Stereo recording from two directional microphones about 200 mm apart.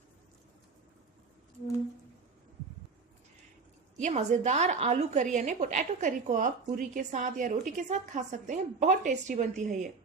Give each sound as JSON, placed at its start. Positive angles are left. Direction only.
{"t": 3.9, "sound": "a woman's voice", "side_deg": -35}